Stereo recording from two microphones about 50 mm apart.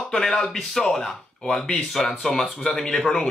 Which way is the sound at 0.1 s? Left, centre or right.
Centre.